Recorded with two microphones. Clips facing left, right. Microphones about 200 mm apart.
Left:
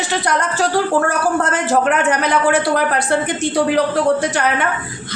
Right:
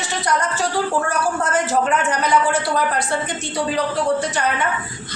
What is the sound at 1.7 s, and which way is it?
A woman's voice, 60° left (ahead or behind).